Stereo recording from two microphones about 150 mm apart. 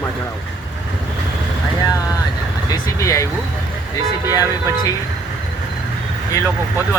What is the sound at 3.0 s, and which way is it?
Speech, 20° left (ahead or behind).